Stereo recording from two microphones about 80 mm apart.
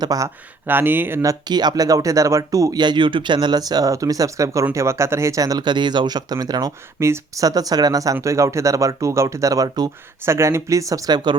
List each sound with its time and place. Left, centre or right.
0.0 s speech: right
0.7 s speech: right
1.2 s speech: right
2.7 s speech: right
5.6 s speech: right
7.0 s speech: right
7.4 s speech: right
10.2 s speech: right